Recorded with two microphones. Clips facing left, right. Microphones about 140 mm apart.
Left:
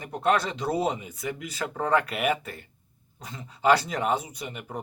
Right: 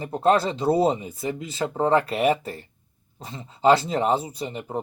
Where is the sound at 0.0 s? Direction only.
30° right (ahead or behind).